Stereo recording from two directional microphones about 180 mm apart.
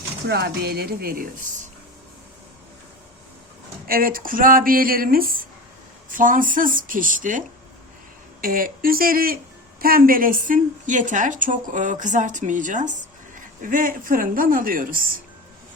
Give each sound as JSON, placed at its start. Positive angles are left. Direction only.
{"t": 0.3, "sound": "speech", "side_deg": -65}
{"t": 3.8, "sound": "a woman's voice", "side_deg": -50}